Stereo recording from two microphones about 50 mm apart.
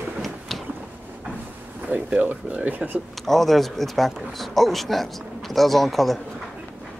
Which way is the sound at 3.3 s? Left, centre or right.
Centre.